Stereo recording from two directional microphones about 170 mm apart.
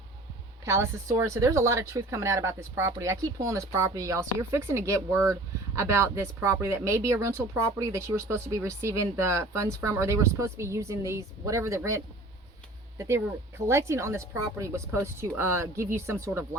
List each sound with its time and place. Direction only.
0.6 s speech: 15° right (ahead or behind)